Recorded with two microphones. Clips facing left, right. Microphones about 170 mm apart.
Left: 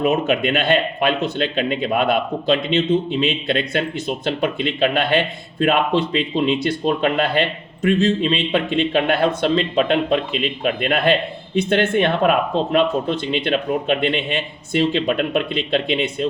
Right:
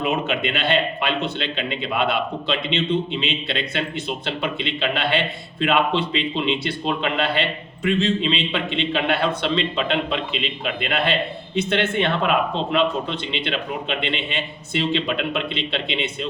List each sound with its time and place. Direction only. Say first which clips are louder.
0.0 s a man's voice: left 5 dB; 45° left (ahead or behind)